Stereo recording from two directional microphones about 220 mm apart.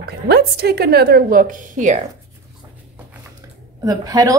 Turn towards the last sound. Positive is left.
turn(degrees=-15)  # may be behind; listen again after turning